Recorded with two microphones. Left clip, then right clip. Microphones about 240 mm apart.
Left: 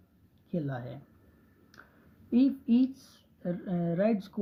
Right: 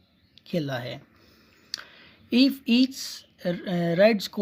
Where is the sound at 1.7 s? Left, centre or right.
Right.